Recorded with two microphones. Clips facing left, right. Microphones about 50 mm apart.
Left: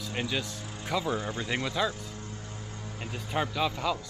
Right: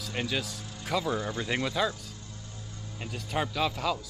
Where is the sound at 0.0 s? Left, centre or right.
Centre.